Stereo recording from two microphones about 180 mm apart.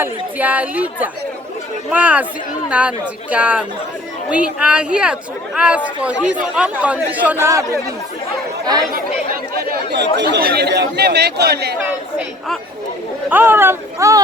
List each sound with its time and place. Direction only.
0.0 s speech: 10° right (ahead or behind)
9.7 s speech: 70° right (ahead or behind)
13.3 s speech: 10° right (ahead or behind)